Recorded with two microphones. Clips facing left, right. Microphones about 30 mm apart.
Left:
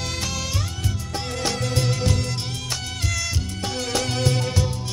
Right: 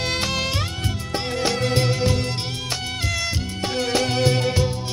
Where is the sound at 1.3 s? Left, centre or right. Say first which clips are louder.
Right 3 dB; centre.